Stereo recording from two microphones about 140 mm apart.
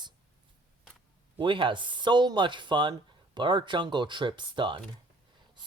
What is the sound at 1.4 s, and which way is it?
Speech, 35° right (ahead or behind).